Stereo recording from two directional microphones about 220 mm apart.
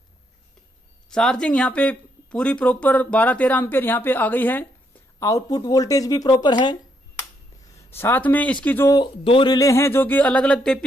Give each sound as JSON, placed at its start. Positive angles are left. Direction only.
{"t": 1.1, "sound": "speech", "side_deg": 5}
{"t": 7.9, "sound": "speech", "side_deg": 10}